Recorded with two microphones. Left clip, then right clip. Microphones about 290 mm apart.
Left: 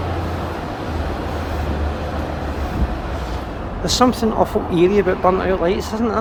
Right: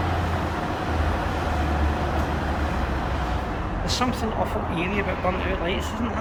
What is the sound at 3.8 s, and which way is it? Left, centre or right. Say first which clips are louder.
Speech: left 10 dB; left.